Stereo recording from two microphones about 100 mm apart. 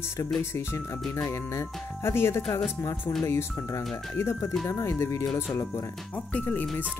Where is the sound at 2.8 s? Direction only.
35° left (ahead or behind).